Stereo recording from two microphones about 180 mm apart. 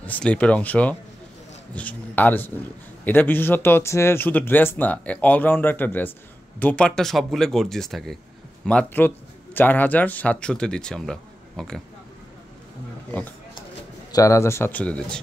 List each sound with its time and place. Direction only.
0.0 s speech: 10° left (ahead or behind)
13.1 s speech: 10° left (ahead or behind)